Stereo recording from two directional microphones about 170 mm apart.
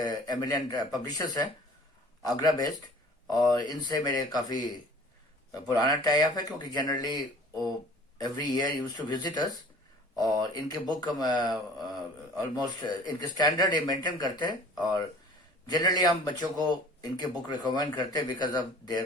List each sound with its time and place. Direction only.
0.0 s a man's voice: 25° left (ahead or behind)
10.5 s speech: 25° left (ahead or behind)